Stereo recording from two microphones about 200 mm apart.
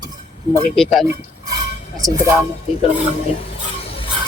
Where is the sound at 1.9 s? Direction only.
20° right (ahead or behind).